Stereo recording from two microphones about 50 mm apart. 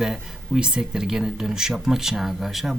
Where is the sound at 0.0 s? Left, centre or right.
Centre.